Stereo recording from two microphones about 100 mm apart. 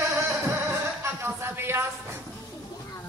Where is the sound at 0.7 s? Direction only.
25° right (ahead or behind).